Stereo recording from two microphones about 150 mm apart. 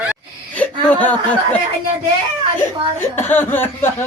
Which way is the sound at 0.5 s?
10° left (ahead or behind).